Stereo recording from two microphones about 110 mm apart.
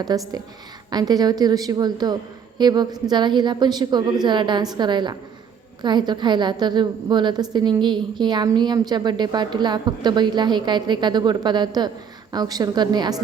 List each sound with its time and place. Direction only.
0.0 s a woman's voice: 35° right (ahead or behind)